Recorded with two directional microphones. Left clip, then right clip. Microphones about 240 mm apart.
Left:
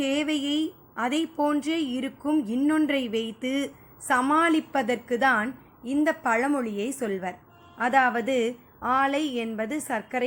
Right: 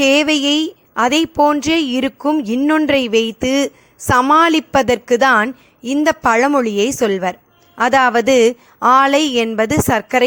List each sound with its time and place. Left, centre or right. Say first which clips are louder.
0.0 s a woman's voice: right 14 dB; right